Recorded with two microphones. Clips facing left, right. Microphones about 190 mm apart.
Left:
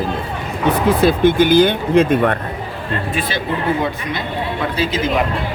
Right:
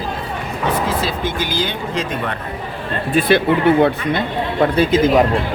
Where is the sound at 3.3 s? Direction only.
60° right (ahead or behind).